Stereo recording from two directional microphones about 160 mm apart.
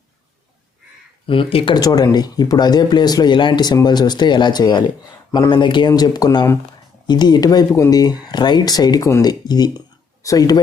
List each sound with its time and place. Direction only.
1.3 s speech: 35° left (ahead or behind)